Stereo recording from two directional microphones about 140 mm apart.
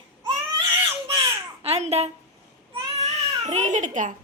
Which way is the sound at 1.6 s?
50° right (ahead or behind).